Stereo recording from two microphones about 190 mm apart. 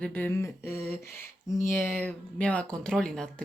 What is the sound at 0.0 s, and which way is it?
Speech, 10° left (ahead or behind).